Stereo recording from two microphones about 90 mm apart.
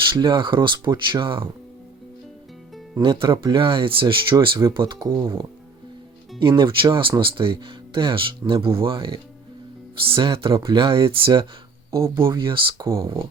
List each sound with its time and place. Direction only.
0.0 s speech: 60° right (ahead or behind)
3.0 s speech: 65° right (ahead or behind)
6.6 s speech: 60° right (ahead or behind)
10.1 s speech: 75° right (ahead or behind)
11.9 s speech: 35° right (ahead or behind)
12.3 s speech: 60° right (ahead or behind)